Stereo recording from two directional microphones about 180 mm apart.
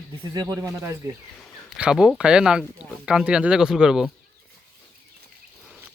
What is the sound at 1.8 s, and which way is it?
Speech, 5° right (ahead or behind).